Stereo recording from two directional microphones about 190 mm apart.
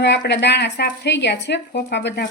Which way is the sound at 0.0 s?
65° left (ahead or behind).